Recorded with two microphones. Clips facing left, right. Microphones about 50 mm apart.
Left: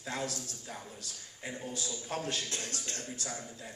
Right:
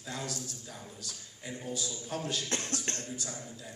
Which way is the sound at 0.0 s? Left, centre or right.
Left.